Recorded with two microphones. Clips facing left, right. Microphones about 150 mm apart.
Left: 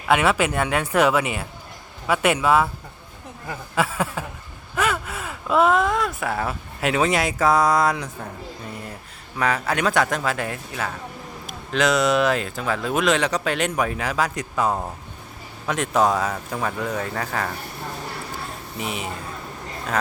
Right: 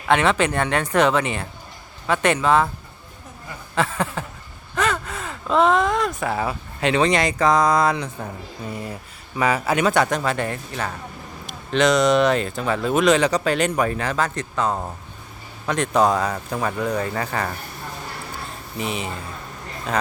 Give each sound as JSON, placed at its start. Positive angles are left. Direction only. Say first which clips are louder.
{"t": 0.1, "sound": "speech", "louder": "right 1 dB", "side_deg": 5}
{"t": 3.8, "sound": "speech", "louder": "right 1 dB", "side_deg": 5}
{"t": 9.4, "sound": "speech", "louder": "right 2 dB", "side_deg": -5}
{"t": 18.8, "sound": "speech", "louder": "right 2 dB", "side_deg": 0}